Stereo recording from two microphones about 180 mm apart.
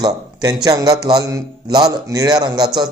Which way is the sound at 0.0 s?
20° right (ahead or behind).